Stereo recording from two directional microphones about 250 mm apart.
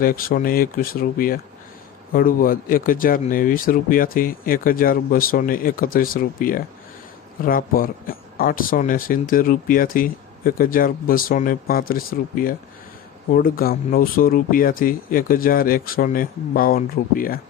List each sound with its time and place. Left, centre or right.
0.0 s speech: left